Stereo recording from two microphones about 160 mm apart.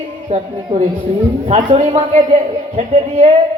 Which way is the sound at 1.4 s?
35° right (ahead or behind).